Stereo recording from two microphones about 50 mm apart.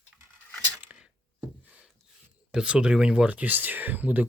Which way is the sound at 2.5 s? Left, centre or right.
Right.